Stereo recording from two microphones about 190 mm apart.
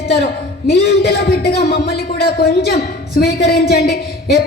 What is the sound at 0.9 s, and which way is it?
A woman's voice, 55° left (ahead or behind).